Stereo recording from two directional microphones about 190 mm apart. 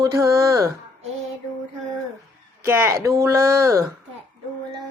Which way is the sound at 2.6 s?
10° right (ahead or behind).